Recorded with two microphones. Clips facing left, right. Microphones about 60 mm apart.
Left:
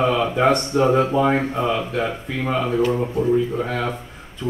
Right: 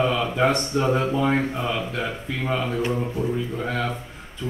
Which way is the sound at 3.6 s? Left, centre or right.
Centre.